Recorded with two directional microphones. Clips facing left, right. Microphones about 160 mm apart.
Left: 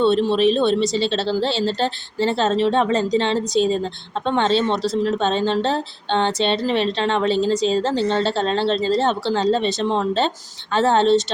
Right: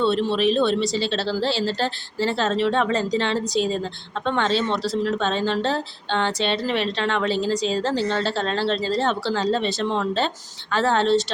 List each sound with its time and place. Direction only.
0.0 s a woman's voice: 20° left (ahead or behind)